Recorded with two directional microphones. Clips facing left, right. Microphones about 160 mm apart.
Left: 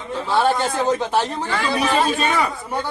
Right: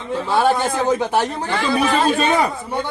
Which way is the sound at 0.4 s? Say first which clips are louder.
Right 1 dB; 10° right (ahead or behind).